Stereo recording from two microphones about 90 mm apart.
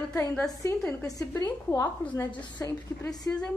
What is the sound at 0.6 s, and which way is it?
A woman's voice, 30° left (ahead or behind).